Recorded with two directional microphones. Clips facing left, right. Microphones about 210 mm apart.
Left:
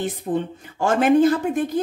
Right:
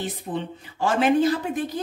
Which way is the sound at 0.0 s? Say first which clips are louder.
Left 5 dB; 50° left (ahead or behind).